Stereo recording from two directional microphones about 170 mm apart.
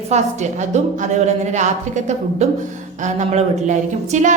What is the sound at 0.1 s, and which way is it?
A woman's voice, 40° right (ahead or behind).